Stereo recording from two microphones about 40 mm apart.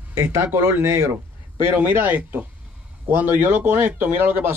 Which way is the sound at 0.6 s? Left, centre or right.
Right.